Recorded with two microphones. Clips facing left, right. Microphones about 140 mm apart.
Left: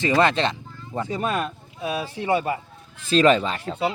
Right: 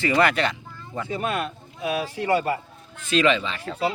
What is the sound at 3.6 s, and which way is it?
Speech, 25° left (ahead or behind).